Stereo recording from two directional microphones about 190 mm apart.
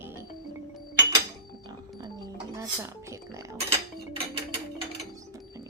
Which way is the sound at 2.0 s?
20° right (ahead or behind).